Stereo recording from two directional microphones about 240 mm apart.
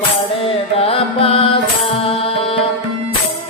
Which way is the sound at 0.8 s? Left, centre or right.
Left.